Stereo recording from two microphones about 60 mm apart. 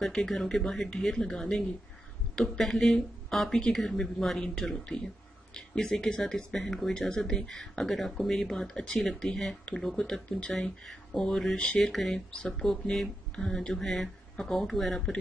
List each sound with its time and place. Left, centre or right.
0.0 s speech: centre
12.4 s speech: centre